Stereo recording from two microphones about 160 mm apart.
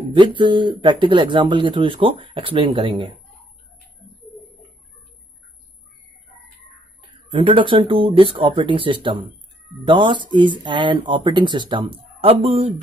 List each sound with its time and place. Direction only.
0.1 s speech: 30° right (ahead or behind)
7.0 s speech: 35° right (ahead or behind)